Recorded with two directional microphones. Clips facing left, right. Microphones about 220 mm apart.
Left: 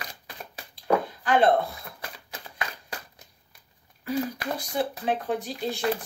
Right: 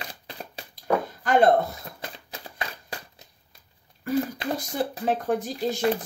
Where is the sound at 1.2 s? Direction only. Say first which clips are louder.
Right 4 dB; 45° right (ahead or behind).